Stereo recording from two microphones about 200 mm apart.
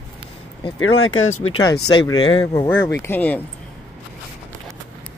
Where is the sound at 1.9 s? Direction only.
20° left (ahead or behind).